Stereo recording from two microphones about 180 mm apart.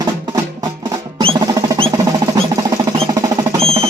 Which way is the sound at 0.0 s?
20° right (ahead or behind).